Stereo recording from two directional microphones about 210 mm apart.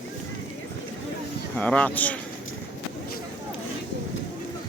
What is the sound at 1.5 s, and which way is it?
Speech, 5° left (ahead or behind).